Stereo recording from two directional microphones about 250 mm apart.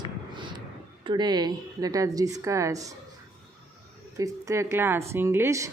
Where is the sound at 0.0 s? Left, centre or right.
Centre.